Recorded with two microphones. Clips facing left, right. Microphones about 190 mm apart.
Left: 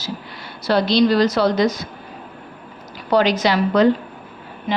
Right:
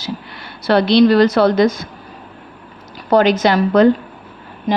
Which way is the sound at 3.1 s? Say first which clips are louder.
Right 4 dB; 50° right (ahead or behind).